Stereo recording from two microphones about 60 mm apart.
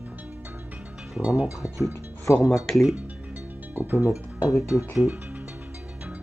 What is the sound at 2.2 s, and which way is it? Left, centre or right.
Speech, left.